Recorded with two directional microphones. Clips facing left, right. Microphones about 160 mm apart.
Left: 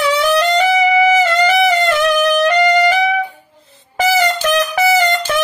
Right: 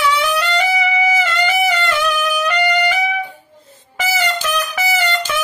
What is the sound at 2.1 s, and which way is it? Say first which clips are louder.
Music: left 6 dB; 40° left (ahead or behind).